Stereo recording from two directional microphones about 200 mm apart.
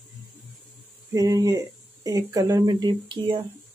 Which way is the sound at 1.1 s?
15° right (ahead or behind).